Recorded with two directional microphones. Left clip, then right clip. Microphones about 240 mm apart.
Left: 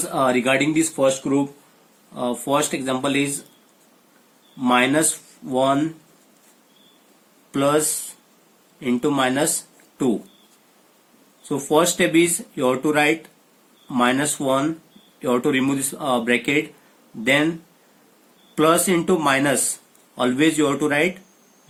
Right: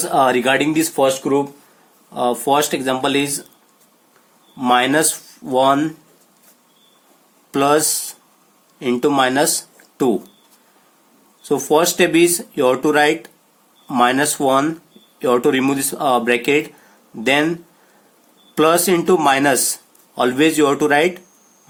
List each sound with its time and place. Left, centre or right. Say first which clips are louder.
0.1 s speech: right 4 dB; right
2.1 s speech: right 6 dB; right
4.6 s speech: right 3 dB; right
7.5 s speech: right 5 dB; right
8.8 s speech: right 5 dB; right
11.4 s speech: right 3 dB; right
18.5 s speech: right 3 dB; right